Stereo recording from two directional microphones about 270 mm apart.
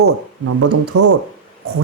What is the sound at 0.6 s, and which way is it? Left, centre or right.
Speech, right.